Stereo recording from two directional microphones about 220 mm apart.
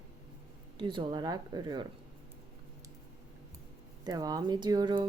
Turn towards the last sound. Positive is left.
turn(degrees=-20)  # may be behind; listen again after turning